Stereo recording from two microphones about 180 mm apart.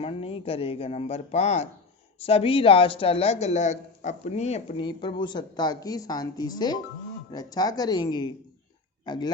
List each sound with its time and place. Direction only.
0.0 s speech: 30° left (ahead or behind)